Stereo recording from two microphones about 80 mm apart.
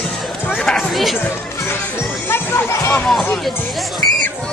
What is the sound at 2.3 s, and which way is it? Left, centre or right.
Music, left.